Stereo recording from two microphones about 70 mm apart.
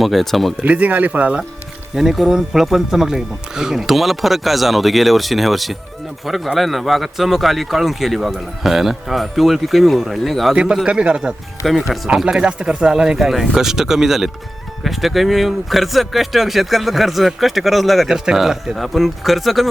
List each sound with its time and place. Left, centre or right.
0.0 s speech: centre
0.6 s speech: right
2.0 s speech: centre
10.5 s speech: centre
11.6 s speech: centre